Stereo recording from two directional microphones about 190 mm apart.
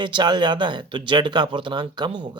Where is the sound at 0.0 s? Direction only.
25° right (ahead or behind).